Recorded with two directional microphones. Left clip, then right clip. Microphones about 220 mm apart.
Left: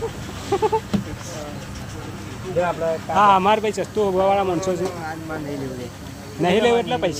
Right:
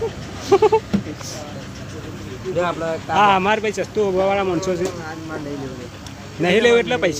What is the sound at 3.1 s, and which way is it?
Speech, 10° right (ahead or behind).